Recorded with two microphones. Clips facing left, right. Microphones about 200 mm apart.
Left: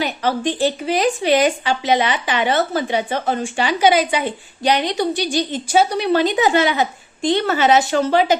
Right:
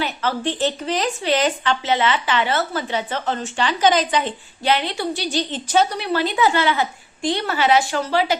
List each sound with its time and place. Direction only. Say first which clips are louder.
0.0 s speech: left 3 dB; 15° left (ahead or behind)
6.0 s a woman's voice: left 4 dB; 20° left (ahead or behind)